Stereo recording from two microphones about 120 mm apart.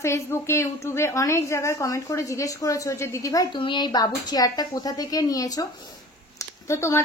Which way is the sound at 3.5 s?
40° left (ahead or behind).